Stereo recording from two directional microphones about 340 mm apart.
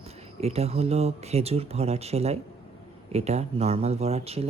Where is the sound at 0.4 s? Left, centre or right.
Centre.